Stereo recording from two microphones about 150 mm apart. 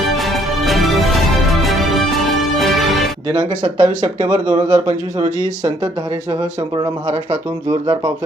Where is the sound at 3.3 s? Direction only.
30° right (ahead or behind).